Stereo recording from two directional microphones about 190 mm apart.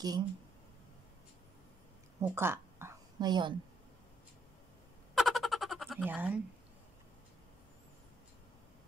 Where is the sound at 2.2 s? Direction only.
10° right (ahead or behind).